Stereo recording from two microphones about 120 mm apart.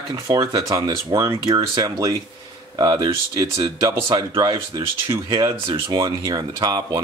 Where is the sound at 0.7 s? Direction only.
30° right (ahead or behind).